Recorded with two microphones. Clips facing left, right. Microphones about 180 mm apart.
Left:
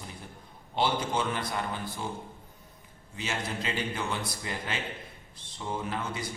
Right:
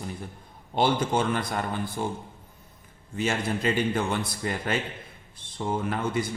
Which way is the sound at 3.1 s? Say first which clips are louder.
Right 7 dB; 50° right (ahead or behind).